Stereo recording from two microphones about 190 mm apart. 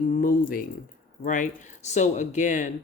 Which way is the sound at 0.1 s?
45° left (ahead or behind).